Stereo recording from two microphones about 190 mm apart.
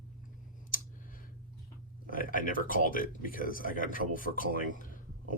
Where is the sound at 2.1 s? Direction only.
45° left (ahead or behind).